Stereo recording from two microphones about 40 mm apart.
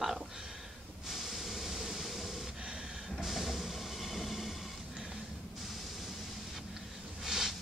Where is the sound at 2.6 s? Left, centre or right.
Centre.